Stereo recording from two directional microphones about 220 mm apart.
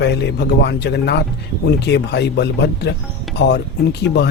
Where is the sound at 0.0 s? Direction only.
50° left (ahead or behind).